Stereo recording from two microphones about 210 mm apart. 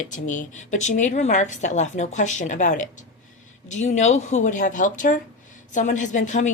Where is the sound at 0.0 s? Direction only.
35° left (ahead or behind).